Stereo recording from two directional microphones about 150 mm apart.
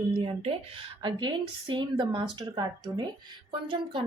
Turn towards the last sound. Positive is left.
turn(degrees=-35)  # may be behind; listen again after turning